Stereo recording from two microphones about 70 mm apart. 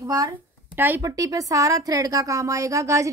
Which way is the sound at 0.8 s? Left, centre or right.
Right.